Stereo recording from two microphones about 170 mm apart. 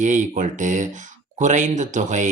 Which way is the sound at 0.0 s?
45° right (ahead or behind).